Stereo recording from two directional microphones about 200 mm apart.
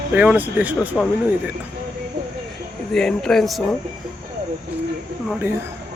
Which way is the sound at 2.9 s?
Centre (ahead or behind).